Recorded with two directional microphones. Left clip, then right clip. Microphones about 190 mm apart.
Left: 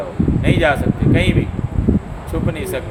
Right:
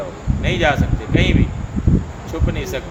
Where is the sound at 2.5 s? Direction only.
20° left (ahead or behind).